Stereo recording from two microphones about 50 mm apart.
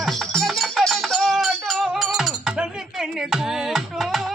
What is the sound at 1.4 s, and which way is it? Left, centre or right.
Music, centre.